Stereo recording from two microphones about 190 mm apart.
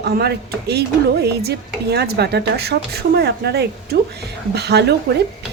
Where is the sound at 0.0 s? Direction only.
60° right (ahead or behind).